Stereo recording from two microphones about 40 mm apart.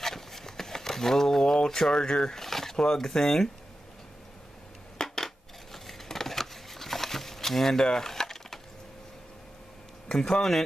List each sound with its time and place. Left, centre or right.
0.0 s a sound: centre
1.6 s speech: centre
4.9 s coin: centre
10.0 s speech: centre